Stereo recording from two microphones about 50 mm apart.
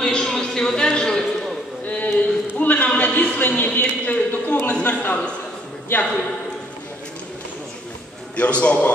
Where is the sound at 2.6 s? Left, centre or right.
Left.